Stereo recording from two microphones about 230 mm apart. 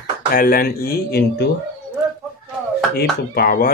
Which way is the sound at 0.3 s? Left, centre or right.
Left.